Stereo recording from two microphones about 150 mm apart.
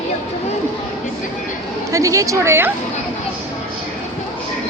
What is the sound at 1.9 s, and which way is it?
Speech, 20° right (ahead or behind).